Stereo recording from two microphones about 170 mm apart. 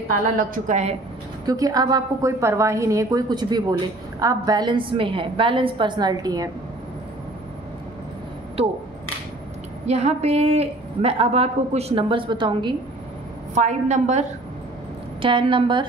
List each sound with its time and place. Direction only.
0.4 s a woman's voice: 45° right (ahead or behind)
1.4 s a woman's voice: 20° right (ahead or behind)
9.8 s a woman's voice: 40° right (ahead or behind)
13.6 s a woman's voice: 45° right (ahead or behind)
15.2 s a woman's voice: 30° right (ahead or behind)